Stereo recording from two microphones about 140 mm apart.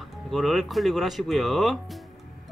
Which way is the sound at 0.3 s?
Centre (ahead or behind).